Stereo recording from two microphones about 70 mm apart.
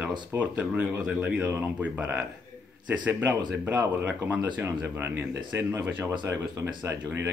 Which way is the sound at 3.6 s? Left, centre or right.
Right.